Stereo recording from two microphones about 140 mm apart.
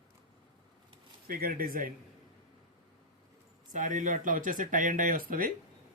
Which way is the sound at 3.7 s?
65° right (ahead or behind).